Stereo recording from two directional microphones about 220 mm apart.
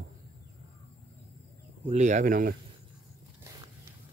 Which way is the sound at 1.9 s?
30° right (ahead or behind).